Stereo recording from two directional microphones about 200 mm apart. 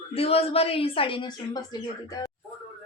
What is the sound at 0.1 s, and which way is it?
A woman's voice, 30° left (ahead or behind).